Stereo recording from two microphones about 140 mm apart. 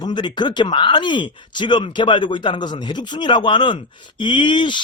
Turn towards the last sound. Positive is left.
turn(degrees=35)  # may be behind; listen again after turning